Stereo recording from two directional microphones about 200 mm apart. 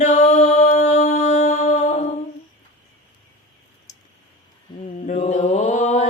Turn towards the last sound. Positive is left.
turn(degrees=35)  # may be behind; listen again after turning